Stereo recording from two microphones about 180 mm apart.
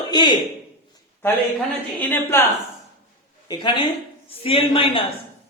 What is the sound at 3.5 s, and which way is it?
A man's voice, 25° left (ahead or behind).